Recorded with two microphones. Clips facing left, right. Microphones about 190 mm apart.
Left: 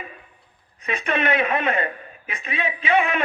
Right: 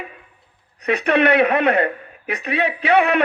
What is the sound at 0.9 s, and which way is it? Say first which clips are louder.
A man's voice: right 7 dB; 65° right (ahead or behind).